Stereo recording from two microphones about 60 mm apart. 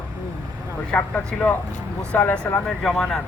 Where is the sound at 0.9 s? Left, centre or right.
Left.